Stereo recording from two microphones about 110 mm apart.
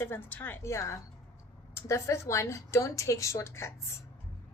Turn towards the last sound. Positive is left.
turn(degrees=25)  # may be behind; listen again after turning